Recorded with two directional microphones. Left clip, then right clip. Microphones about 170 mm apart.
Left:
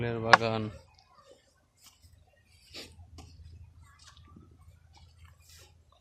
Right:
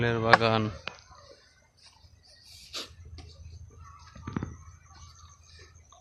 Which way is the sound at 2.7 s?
20° left (ahead or behind).